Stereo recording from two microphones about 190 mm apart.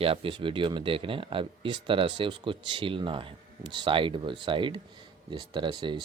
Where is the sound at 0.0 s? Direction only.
30° right (ahead or behind).